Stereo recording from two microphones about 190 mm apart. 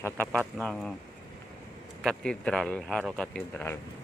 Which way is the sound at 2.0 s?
5° left (ahead or behind).